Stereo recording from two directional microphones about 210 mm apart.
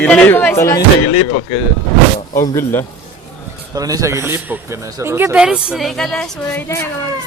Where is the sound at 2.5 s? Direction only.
10° left (ahead or behind).